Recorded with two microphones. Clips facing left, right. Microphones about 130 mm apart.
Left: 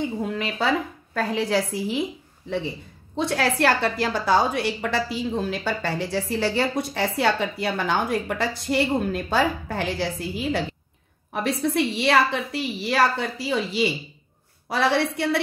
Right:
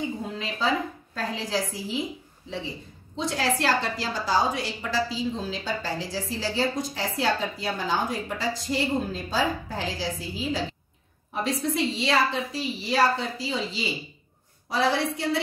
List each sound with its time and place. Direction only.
0.3 s a woman's voice: 65° left (ahead or behind)
3.2 s a woman's voice: 60° left (ahead or behind)